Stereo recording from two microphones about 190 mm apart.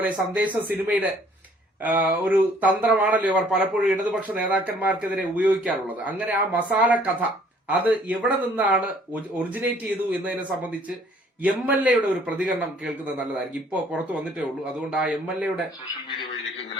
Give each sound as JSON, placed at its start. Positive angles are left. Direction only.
{"t": 0.0, "sound": "speech", "side_deg": -10}
{"t": 10.1, "sound": "speech", "side_deg": -5}